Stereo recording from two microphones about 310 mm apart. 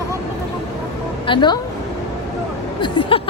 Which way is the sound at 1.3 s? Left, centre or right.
Centre.